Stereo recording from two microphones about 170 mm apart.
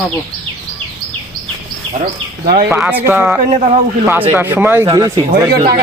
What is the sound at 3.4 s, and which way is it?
Speech, 45° right (ahead or behind).